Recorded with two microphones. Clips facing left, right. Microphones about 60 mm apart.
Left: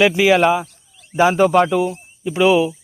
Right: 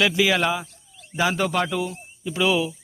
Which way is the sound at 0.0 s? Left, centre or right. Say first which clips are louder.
Left 7 dB; left.